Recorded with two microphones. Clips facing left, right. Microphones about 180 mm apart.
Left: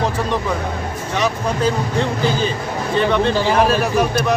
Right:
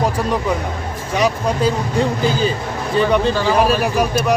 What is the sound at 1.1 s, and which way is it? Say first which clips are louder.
Speech: right 3 dB; 10° right (ahead or behind).